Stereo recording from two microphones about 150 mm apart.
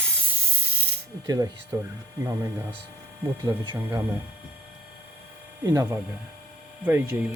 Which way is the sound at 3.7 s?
15° right (ahead or behind).